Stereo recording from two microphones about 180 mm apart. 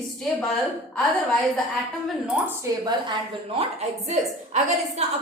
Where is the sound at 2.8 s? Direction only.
30° right (ahead or behind).